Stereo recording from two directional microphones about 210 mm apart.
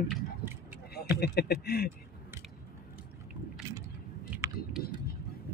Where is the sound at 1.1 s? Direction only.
50° left (ahead or behind).